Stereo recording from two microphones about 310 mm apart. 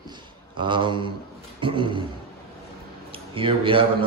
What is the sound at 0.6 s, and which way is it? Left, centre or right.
A man's voice, centre.